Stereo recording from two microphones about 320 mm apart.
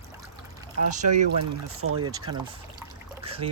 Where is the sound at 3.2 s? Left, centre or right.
Centre.